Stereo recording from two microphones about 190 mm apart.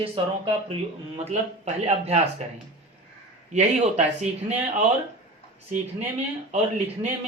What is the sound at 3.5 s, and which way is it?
Speech, 35° right (ahead or behind).